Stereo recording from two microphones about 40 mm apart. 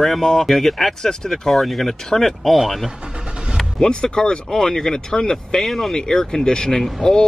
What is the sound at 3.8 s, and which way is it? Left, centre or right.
Speech, centre.